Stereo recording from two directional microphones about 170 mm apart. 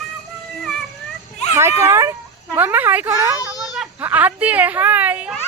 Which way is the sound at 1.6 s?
15° right (ahead or behind).